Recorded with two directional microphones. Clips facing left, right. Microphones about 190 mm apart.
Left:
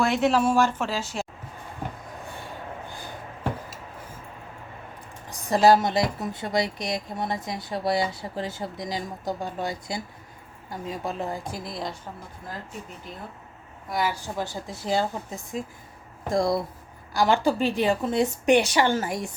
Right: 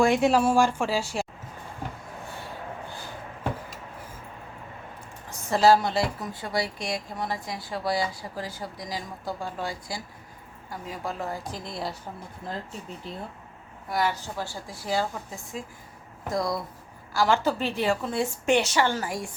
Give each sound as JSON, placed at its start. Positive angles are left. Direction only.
{"t": 0.0, "sound": "speech", "side_deg": -10}
{"t": 5.3, "sound": "a woman's voice", "side_deg": 15}
{"t": 11.6, "sound": "a woman's voice", "side_deg": 0}
{"t": 13.9, "sound": "a woman's voice", "side_deg": 5}
{"t": 14.2, "sound": "a woman's voice", "side_deg": 20}
{"t": 16.3, "sound": "a woman's voice", "side_deg": 25}